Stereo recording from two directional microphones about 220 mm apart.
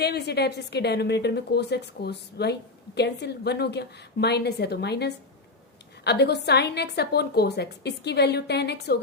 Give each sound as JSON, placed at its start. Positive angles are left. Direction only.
{"t": 0.0, "sound": "a woman's voice", "side_deg": 50}